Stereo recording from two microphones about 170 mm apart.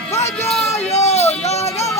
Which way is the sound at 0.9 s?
40° left (ahead or behind).